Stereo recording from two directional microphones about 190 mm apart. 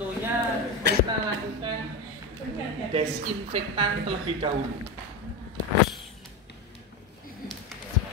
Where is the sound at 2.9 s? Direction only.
30° right (ahead or behind).